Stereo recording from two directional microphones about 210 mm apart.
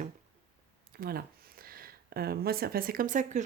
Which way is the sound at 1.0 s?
45° right (ahead or behind).